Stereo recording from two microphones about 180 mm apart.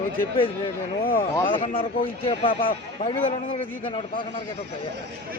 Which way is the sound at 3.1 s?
30° left (ahead or behind).